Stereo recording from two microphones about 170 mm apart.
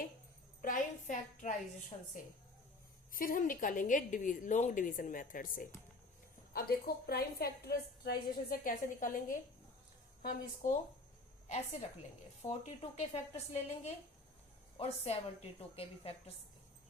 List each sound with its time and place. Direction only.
0.6 s a sound: 50° left (ahead or behind)
1.9 s a woman's voice: 30° left (ahead or behind)
3.1 s a woman's voice: 55° left (ahead or behind); by 16.3 s 35° left (ahead or behind)